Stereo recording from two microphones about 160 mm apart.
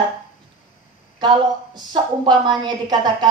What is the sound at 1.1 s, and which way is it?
A woman's voice, 25° right (ahead or behind).